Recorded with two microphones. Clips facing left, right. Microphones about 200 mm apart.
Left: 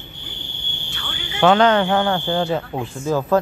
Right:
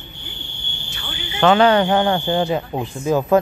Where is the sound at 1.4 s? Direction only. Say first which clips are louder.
Right 1 dB; 5° right (ahead or behind).